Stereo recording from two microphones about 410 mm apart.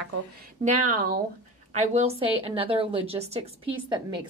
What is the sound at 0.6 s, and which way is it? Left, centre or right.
A woman's voice, centre.